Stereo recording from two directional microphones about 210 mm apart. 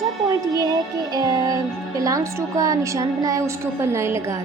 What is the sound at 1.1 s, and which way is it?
A woman's voice, 15° right (ahead or behind).